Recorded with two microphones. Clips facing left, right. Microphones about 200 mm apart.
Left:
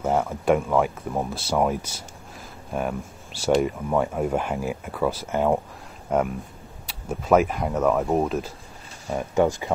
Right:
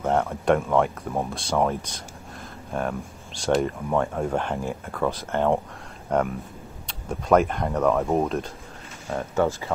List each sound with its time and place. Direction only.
0.0 s speech: centre (ahead or behind)
9.1 s speech: 15° left (ahead or behind)